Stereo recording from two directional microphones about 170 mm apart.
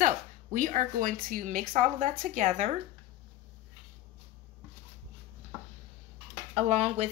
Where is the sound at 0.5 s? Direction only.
50° right (ahead or behind).